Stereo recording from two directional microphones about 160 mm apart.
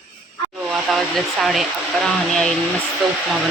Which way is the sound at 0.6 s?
Centre (ahead or behind).